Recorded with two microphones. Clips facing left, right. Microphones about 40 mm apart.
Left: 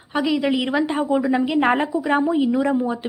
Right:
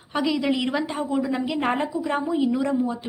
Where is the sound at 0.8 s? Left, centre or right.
Left.